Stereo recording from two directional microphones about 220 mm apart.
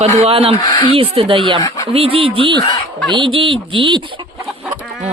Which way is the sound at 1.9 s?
25° right (ahead or behind).